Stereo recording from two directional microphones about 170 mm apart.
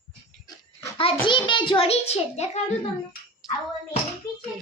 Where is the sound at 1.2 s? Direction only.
30° left (ahead or behind).